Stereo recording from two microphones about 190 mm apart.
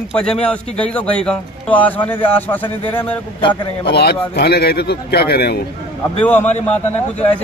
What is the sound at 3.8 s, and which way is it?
Speech, 60° left (ahead or behind).